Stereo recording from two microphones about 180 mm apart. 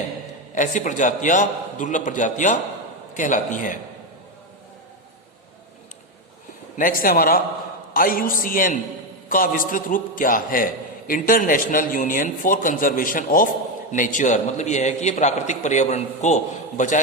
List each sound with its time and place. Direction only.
0.5 s a man's voice: 45° left (ahead or behind)
6.7 s a man's voice: 50° left (ahead or behind)